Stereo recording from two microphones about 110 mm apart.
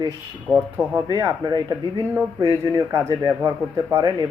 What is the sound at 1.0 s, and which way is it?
Speech, 35° right (ahead or behind).